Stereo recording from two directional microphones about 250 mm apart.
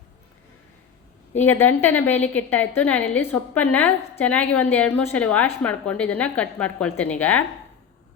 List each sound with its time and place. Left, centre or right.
1.3 s a woman's voice: centre